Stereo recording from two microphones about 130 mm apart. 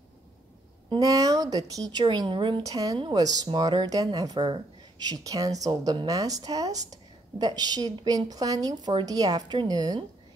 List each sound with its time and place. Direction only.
0.8 s a sound: 30° right (ahead or behind)
1.7 s speech: 30° right (ahead or behind)
2.6 s speech: 25° right (ahead or behind)